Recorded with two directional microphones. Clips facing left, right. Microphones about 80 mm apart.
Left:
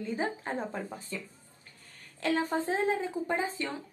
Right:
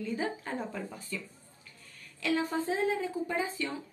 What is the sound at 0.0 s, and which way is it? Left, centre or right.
Speech, left.